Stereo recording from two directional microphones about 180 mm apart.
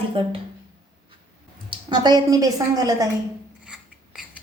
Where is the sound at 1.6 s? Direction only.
25° right (ahead or behind).